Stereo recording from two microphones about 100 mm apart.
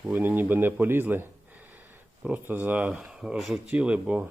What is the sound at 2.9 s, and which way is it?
Speech, 5° right (ahead or behind).